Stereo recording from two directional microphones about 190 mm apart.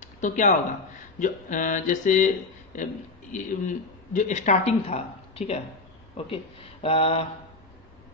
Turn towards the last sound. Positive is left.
turn(degrees=30)  # may be behind; listen again after turning